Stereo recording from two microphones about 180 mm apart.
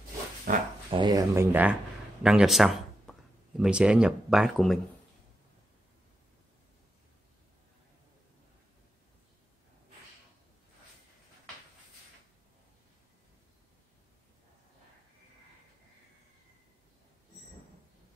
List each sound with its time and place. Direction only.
0.5 s speech: 50° right (ahead or behind)
0.8 s speech: 25° right (ahead or behind); by 4.7 s centre (ahead or behind)